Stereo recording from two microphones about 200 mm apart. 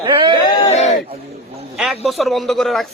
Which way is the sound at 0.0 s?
25° right (ahead or behind).